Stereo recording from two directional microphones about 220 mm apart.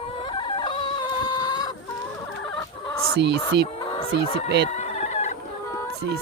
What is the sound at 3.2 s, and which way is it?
Speech, 50° right (ahead or behind).